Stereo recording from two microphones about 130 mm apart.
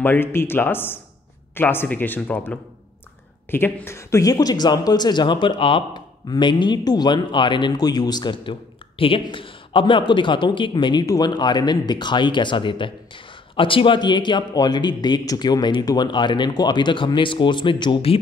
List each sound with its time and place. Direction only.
0.0 s speech: 15° left (ahead or behind); by 18.2 s 45° left (ahead or behind)